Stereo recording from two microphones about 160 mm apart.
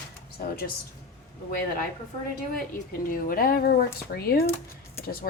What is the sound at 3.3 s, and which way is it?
A woman's voice, 65° left (ahead or behind).